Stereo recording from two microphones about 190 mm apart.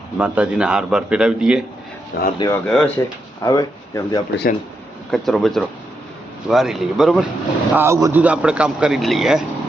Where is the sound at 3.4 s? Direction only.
20° left (ahead or behind).